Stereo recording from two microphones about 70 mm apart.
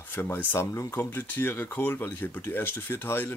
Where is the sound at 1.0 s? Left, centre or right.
Left.